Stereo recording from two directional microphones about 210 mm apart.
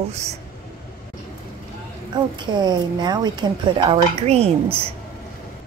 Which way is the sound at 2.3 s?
20° right (ahead or behind).